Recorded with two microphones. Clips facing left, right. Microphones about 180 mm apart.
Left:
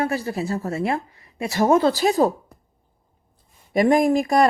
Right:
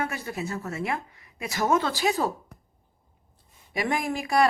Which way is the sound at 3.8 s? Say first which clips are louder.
Left 11 dB; 40° left (ahead or behind).